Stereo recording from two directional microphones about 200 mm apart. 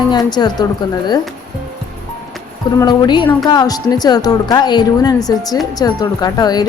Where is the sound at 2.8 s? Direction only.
20° left (ahead or behind).